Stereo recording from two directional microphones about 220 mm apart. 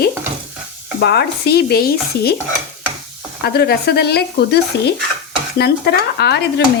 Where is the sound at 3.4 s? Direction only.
45° left (ahead or behind).